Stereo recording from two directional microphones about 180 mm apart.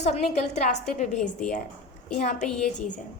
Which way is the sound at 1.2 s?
5° left (ahead or behind).